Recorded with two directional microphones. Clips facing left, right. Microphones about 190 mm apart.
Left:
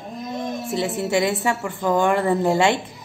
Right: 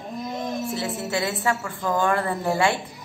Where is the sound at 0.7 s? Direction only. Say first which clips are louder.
Left 5 dB; 20° left (ahead or behind).